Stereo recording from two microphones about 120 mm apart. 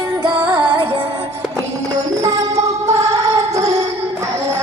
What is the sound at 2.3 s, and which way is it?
Music, 30° right (ahead or behind).